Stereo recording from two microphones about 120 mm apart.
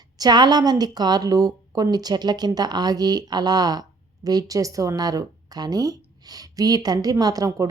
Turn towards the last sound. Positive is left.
turn(degrees=-30)  # may be behind; listen again after turning